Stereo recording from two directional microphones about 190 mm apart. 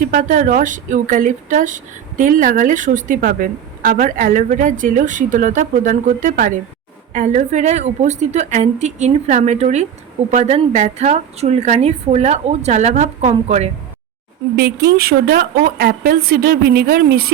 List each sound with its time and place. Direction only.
0.0 s a woman's voice: 45° right (ahead or behind)
14.5 s speech: 55° right (ahead or behind)